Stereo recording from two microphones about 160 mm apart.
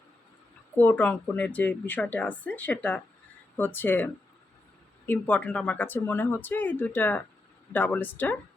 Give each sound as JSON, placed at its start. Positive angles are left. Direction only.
{"t": 0.8, "sound": "speech", "side_deg": 10}